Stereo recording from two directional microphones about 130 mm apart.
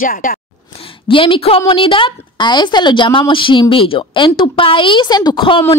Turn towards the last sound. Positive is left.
turn(degrees=40)  # may be behind; listen again after turning